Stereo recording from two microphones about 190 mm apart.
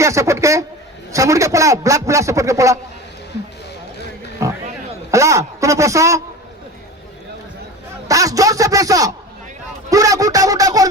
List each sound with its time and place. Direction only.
0.0 s a man's voice: 15° right (ahead or behind)
4.4 s music: 15° right (ahead or behind)
5.1 s a man's voice: 15° right (ahead or behind)
8.0 s a man's voice: 15° right (ahead or behind)